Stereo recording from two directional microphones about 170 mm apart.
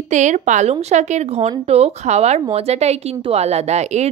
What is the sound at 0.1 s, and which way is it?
A woman's voice, 45° right (ahead or behind).